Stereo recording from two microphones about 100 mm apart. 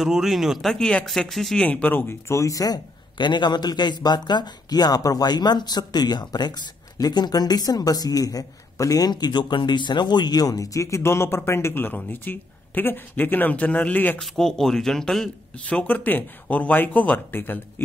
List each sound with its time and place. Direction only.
0.0 s speech: 5° right (ahead or behind)
1.7 s a man's voice: 20° left (ahead or behind)
14.2 s speech: 5° left (ahead or behind)
15.7 s speech: 15° left (ahead or behind)